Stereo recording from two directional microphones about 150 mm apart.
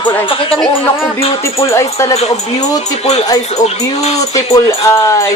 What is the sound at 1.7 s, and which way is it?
Speech, 20° left (ahead or behind).